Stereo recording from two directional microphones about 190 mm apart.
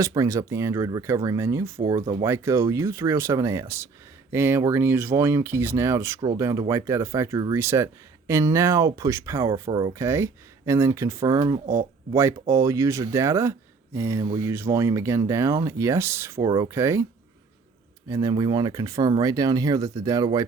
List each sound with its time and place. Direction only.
0.0 s speech: 15° right (ahead or behind)
18.1 s speech: 20° right (ahead or behind)